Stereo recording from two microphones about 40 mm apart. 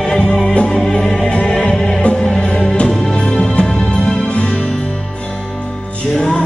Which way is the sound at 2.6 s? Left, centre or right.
Left.